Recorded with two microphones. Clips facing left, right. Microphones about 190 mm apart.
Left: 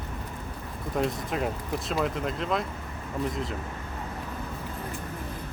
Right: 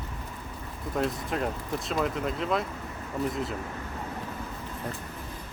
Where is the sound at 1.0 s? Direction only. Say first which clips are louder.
Left 1 dB; centre (ahead or behind).